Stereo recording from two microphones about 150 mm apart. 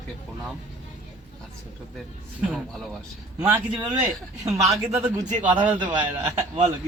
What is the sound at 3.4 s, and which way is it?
Speech, 20° right (ahead or behind).